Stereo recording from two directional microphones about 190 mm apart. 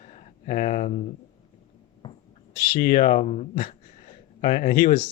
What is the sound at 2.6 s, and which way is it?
Speech, 55° left (ahead or behind).